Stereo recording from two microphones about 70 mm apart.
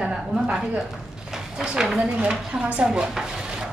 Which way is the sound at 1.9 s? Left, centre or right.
Centre.